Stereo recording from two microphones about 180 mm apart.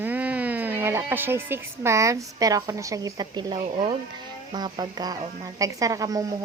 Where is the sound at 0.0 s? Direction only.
10° right (ahead or behind).